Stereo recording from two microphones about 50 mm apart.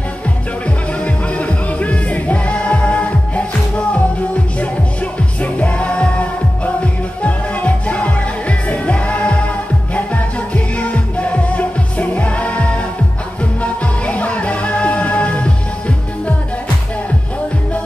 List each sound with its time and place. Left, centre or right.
1.0 s music: left
5.4 s music: left